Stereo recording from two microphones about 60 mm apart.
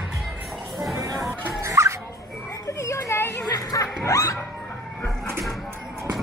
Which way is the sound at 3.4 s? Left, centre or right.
Left.